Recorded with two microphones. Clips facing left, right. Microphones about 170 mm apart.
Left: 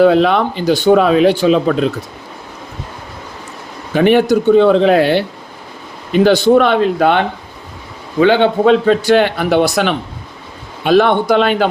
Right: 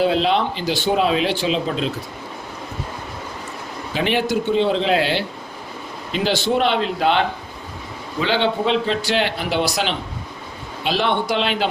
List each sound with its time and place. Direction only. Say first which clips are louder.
0.0 s a man's voice: left 8 dB; 55° left (ahead or behind)
3.9 s a man's voice: left 10 dB; 50° left (ahead or behind)